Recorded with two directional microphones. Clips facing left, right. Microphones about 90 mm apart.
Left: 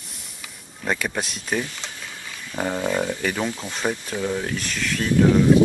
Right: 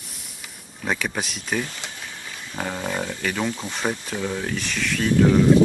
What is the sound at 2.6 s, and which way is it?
Speech, 15° left (ahead or behind).